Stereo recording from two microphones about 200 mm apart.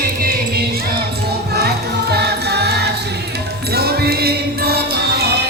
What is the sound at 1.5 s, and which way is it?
Music, 55° right (ahead or behind).